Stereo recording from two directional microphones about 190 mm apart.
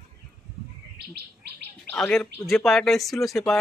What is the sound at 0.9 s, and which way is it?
Bird, 60° right (ahead or behind).